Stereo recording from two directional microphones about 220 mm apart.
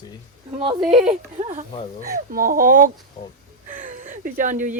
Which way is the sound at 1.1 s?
35° right (ahead or behind).